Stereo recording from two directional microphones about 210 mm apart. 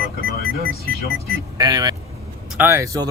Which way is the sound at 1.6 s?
20° right (ahead or behind).